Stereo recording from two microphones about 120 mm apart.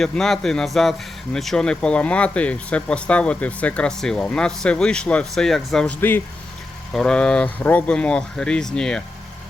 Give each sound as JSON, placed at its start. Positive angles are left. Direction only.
{"t": 0.0, "sound": "speech", "side_deg": 5}
{"t": 6.0, "sound": "speech", "side_deg": 15}
{"t": 6.9, "sound": "speech", "side_deg": 5}